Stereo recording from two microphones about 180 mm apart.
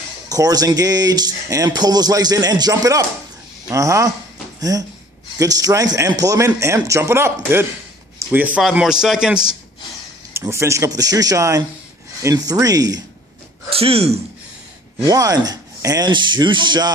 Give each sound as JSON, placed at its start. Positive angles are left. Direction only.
{"t": 0.3, "sound": "a man's voice", "side_deg": -20}
{"t": 10.3, "sound": "speech", "side_deg": -15}
{"t": 13.7, "sound": "speech", "side_deg": -35}
{"t": 15.0, "sound": "speech", "side_deg": -20}